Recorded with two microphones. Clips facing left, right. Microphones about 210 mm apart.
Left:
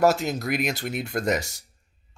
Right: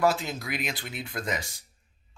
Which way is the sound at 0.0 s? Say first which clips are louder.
Left 5 dB; 40° left (ahead or behind).